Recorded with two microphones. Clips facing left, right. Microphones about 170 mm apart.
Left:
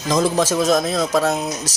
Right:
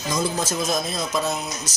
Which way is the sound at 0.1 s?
90° left.